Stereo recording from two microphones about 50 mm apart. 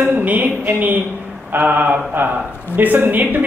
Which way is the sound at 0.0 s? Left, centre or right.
Right.